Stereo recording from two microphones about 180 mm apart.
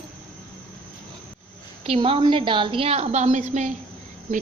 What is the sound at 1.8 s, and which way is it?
A woman's voice, 30° right (ahead or behind).